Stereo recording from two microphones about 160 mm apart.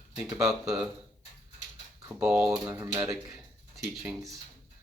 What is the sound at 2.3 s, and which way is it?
Speech, 20° right (ahead or behind).